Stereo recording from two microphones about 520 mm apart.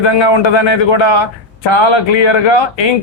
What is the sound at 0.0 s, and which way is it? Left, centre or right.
Speech, left.